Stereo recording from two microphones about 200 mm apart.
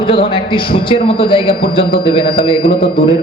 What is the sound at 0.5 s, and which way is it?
A man's voice, 25° left (ahead or behind).